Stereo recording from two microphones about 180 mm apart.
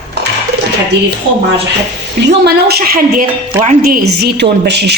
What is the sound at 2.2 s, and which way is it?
Speech, 65° right (ahead or behind).